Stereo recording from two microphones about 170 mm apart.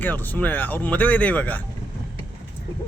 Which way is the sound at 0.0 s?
10° left (ahead or behind).